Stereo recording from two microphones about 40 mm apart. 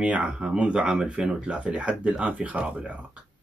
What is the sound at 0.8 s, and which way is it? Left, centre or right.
Speech, right.